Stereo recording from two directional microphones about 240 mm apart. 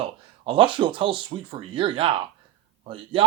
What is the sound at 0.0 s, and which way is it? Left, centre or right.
A man's voice, right.